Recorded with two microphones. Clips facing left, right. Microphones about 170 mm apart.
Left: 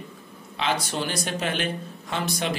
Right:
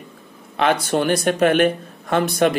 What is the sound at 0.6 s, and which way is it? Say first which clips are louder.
A man's voice: right 8 dB; 55° right (ahead or behind).